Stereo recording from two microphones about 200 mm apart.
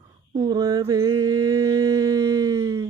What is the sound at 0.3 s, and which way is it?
Mantra, 20° right (ahead or behind).